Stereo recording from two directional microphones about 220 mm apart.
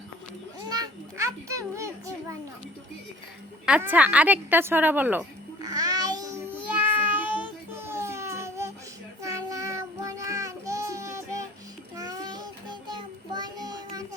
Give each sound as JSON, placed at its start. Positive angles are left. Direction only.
{"t": 0.7, "sound": "children playing", "side_deg": -15}
{"t": 3.7, "sound": "a woman's voice", "side_deg": -5}
{"t": 5.6, "sound": "babbling", "side_deg": -15}
{"t": 9.2, "sound": "child singing", "side_deg": -15}